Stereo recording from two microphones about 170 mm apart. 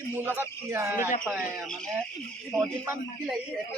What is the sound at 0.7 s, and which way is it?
Speech, 15° right (ahead or behind).